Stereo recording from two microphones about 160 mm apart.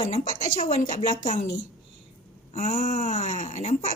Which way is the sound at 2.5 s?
50° left (ahead or behind).